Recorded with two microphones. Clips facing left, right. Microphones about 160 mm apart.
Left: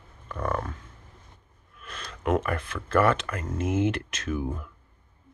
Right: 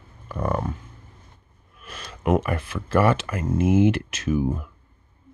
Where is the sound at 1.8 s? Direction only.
10° right (ahead or behind).